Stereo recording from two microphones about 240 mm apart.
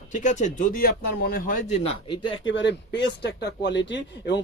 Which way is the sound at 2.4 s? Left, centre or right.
Left.